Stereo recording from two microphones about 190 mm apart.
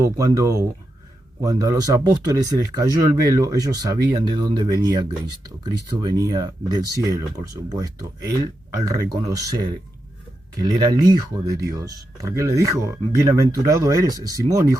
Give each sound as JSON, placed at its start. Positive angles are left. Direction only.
{"t": 0.0, "sound": "speech", "side_deg": -20}
{"t": 10.6, "sound": "speech", "side_deg": -20}